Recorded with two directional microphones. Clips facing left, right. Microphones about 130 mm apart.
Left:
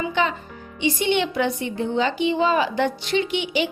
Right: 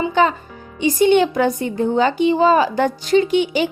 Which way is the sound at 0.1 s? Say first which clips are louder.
Right 6 dB; 40° right (ahead or behind).